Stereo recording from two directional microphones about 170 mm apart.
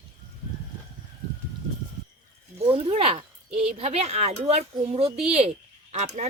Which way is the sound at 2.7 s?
35° right (ahead or behind).